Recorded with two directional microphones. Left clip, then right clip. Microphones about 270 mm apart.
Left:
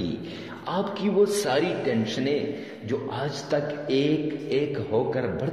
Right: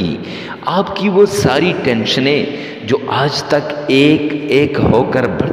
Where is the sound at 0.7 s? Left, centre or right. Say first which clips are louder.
Right 12 dB; right.